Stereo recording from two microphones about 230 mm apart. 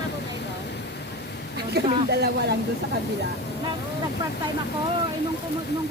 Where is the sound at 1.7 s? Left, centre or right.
Right.